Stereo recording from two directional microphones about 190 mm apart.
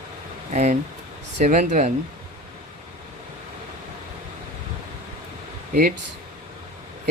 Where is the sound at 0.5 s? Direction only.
35° right (ahead or behind).